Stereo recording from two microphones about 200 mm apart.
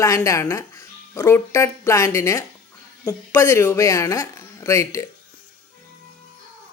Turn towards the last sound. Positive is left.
turn(degrees=15)  # may be behind; listen again after turning